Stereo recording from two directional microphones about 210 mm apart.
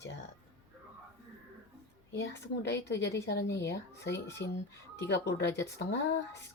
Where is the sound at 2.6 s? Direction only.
55° left (ahead or behind).